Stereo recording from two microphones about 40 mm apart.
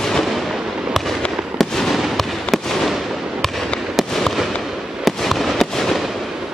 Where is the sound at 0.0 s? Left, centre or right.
Centre.